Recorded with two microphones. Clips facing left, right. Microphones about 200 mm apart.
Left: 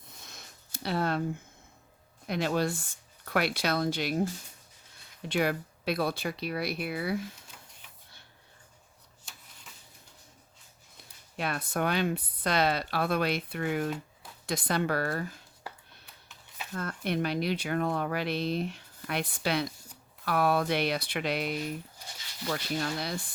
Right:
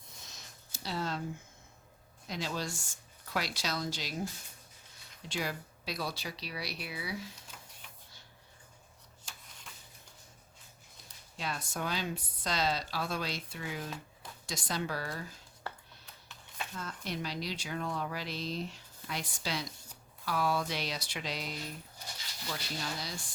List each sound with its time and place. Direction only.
0.3 s a sound: 55° left (ahead or behind)
2.2 s speech: 60° left (ahead or behind)
5.3 s speech: 60° left (ahead or behind)
11.3 s speech: 60° left (ahead or behind)
16.7 s speech: 60° left (ahead or behind)